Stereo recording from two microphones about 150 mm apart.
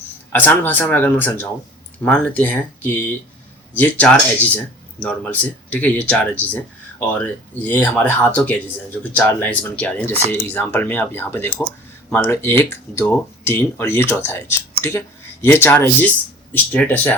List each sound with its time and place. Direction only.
0.3 s speech: 10° left (ahead or behind)
7.6 s speech: 10° left (ahead or behind)